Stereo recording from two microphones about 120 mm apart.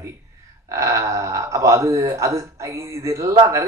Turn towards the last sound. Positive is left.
turn(degrees=-25)  # may be behind; listen again after turning